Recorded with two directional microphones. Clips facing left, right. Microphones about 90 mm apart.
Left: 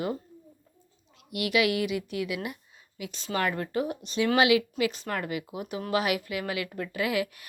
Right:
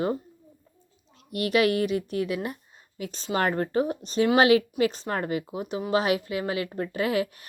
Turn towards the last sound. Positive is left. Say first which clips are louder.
# right 3 dB
turn(degrees=-35)  # may be behind; listen again after turning